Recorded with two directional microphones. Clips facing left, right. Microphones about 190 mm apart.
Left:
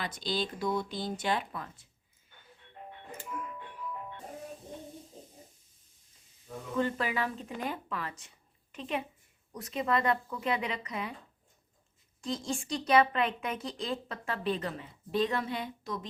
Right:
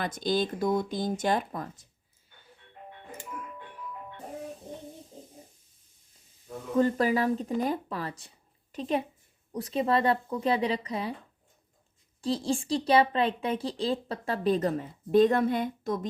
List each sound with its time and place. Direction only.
0.0 s speech: 50° right (ahead or behind)
6.7 s a woman's voice: 40° right (ahead or behind)
12.2 s speech: 35° right (ahead or behind); by 16.0 s 50° right (ahead or behind)